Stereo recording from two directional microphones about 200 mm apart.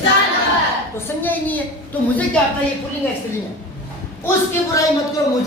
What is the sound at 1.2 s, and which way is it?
Speech, 10° left (ahead or behind).